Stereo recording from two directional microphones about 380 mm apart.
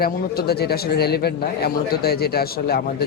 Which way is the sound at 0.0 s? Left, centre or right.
Left.